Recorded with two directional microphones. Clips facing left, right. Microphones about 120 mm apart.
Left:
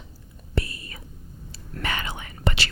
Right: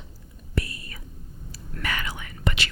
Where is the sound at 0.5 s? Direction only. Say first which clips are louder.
Left 1 dB; 25° left (ahead or behind).